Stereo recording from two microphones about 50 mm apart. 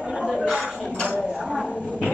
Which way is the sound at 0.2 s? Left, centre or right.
Centre.